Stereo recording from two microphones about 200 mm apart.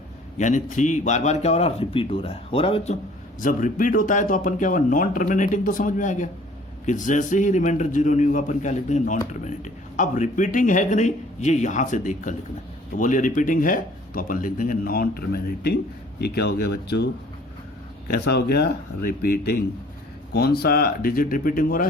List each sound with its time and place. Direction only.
0.3 s a man's voice: 35° left (ahead or behind)
3.4 s a man's voice: 40° left (ahead or behind)
18.1 s a man's voice: 55° left (ahead or behind)